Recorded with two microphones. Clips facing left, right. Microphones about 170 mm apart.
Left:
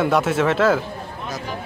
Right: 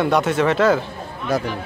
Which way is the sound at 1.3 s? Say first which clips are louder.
Right 12 dB; 60° right (ahead or behind).